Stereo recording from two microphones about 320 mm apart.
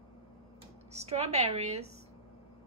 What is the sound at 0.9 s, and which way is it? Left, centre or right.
Speech, centre.